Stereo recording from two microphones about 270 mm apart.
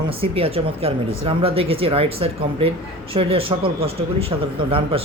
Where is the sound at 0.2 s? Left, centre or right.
Right.